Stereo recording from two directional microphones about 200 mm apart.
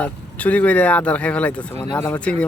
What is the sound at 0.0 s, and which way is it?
Speech, 5° left (ahead or behind).